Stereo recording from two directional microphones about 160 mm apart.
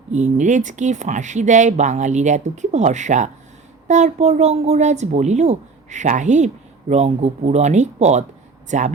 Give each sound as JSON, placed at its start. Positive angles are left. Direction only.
{"t": 0.1, "sound": "speech", "side_deg": -50}